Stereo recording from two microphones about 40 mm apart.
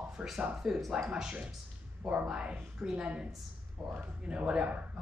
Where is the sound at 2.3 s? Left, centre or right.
Right.